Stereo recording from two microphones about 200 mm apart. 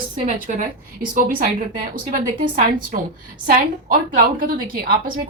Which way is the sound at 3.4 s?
40° right (ahead or behind).